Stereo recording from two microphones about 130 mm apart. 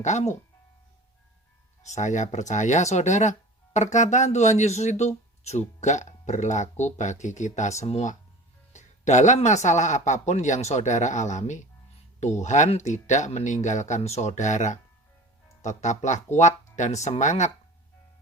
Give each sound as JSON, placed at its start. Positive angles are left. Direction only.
{"t": 0.0, "sound": "speech", "side_deg": 65}
{"t": 1.8, "sound": "a man's voice", "side_deg": 65}